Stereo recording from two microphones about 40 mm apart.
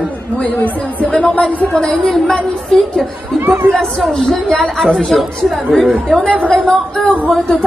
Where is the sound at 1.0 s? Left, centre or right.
Left.